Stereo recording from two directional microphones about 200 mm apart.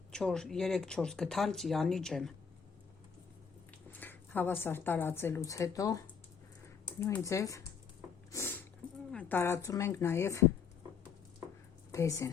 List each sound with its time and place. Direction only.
0.1 s speech: 5° left (ahead or behind)
3.9 s speech: 10° left (ahead or behind)
8.3 s a sound: 15° left (ahead or behind)
9.1 s speech: 10° left (ahead or behind)
11.9 s a woman's voice: 15° left (ahead or behind)